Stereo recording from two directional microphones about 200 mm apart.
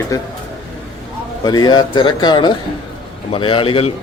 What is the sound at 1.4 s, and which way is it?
A man's voice, 20° left (ahead or behind).